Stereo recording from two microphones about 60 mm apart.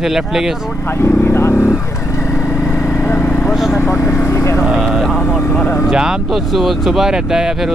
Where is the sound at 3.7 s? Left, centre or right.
Left.